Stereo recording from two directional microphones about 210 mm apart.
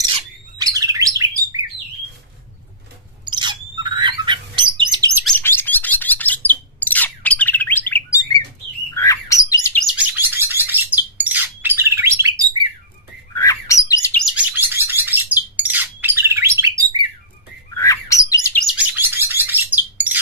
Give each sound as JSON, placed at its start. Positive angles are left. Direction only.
{"t": 0.1, "sound": "bird", "side_deg": -20}
{"t": 3.3, "sound": "a sound", "side_deg": -20}
{"t": 4.7, "sound": "bird", "side_deg": -15}
{"t": 5.2, "sound": "bird", "side_deg": 10}
{"t": 9.8, "sound": "bird", "side_deg": -5}
{"t": 13.3, "sound": "bird", "side_deg": 15}
{"t": 14.2, "sound": "bird", "side_deg": -5}
{"t": 17.7, "sound": "bird", "side_deg": 15}
{"t": 18.6, "sound": "bird", "side_deg": -5}